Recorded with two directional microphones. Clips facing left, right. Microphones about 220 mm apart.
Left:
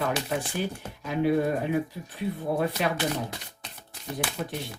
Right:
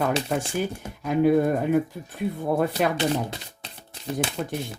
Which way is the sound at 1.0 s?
50° right (ahead or behind).